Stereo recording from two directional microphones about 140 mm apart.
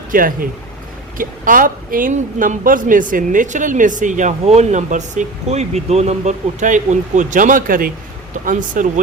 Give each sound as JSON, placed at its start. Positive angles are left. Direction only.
{"t": 0.1, "sound": "a woman's voice", "side_deg": -80}
{"t": 8.4, "sound": "speech", "side_deg": -70}